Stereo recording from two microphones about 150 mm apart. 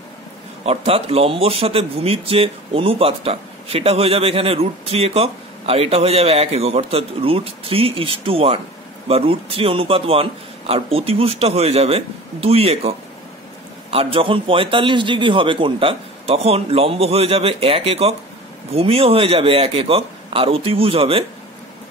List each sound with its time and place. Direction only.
0.7 s speech: 40° right (ahead or behind)